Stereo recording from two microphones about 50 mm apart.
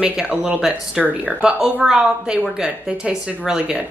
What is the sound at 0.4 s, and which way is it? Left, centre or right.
Speech, centre.